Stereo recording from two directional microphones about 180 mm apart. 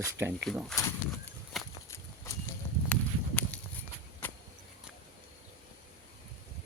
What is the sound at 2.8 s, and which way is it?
Clip-clop, 10° left (ahead or behind).